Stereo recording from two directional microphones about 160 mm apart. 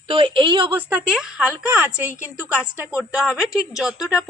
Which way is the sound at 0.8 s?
10° right (ahead or behind).